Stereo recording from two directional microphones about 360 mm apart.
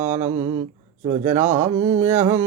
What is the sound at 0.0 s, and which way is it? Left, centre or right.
Speech, centre.